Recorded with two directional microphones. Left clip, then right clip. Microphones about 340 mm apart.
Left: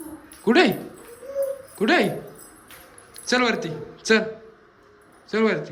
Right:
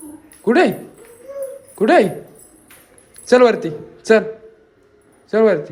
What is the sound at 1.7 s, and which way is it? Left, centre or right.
A man's voice, centre.